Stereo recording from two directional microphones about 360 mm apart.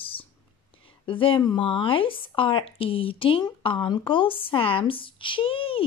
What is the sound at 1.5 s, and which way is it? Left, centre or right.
A woman's voice, centre.